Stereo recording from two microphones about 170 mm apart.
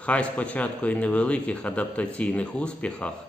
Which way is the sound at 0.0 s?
5° left (ahead or behind).